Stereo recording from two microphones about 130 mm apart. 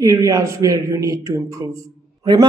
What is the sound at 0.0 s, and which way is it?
A man's voice, 25° right (ahead or behind).